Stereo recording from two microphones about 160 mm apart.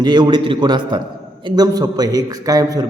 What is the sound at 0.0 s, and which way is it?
A man's voice, 25° right (ahead or behind).